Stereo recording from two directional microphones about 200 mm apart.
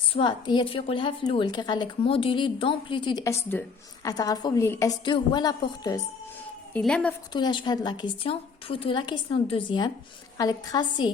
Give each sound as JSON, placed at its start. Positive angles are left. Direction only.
{"t": 0.1, "sound": "a woman's voice", "side_deg": 25}
{"t": 6.7, "sound": "a woman's voice", "side_deg": 5}
{"t": 7.3, "sound": "a woman's voice", "side_deg": 20}